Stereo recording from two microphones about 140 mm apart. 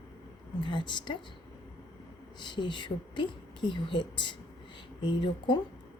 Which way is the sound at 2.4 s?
35° left (ahead or behind).